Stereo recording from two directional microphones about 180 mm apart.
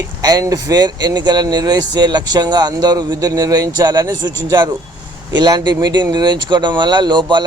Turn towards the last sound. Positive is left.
turn(degrees=-25)  # may be behind; listen again after turning